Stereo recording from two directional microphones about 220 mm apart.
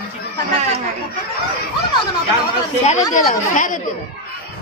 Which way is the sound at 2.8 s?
30° left (ahead or behind).